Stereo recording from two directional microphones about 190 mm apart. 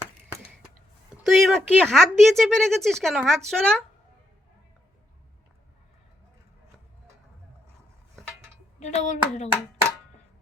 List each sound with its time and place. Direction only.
1.1 s speech: centre (ahead or behind)
8.8 s speech: 35° left (ahead or behind)